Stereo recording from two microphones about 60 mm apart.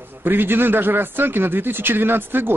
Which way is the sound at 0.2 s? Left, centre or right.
Right.